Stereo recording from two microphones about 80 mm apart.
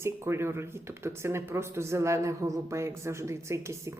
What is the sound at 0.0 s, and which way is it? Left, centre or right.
Speech, right.